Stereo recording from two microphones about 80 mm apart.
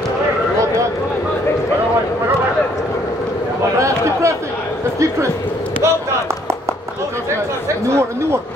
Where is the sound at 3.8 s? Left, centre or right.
Right.